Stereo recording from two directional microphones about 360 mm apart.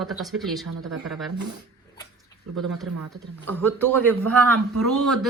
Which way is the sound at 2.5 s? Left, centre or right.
Right.